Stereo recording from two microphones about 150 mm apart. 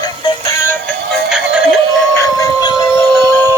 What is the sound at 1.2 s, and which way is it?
Synthetic singing, 5° right (ahead or behind).